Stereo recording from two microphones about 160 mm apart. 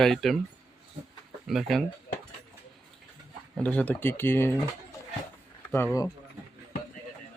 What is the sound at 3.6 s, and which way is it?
Speech, 10° left (ahead or behind).